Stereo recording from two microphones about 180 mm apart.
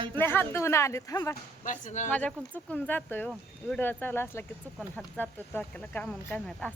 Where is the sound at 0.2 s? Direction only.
15° left (ahead or behind).